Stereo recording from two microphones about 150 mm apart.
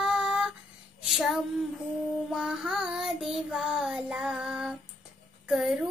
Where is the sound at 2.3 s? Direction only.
5° right (ahead or behind).